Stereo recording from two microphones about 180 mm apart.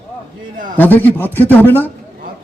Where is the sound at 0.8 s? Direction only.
10° left (ahead or behind).